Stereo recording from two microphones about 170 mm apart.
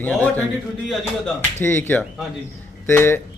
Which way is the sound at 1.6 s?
15° left (ahead or behind).